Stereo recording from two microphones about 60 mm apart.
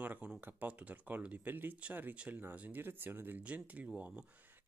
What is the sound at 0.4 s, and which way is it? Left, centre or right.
Speech, right.